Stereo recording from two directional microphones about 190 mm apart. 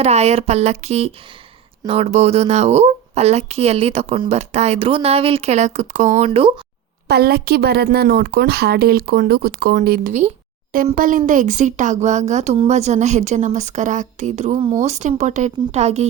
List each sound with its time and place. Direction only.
0.0 s speech: 35° right (ahead or behind)
7.1 s speech: 55° right (ahead or behind); by 16.0 s 35° right (ahead or behind)